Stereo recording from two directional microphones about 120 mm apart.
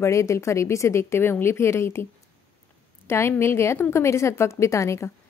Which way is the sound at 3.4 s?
20° left (ahead or behind).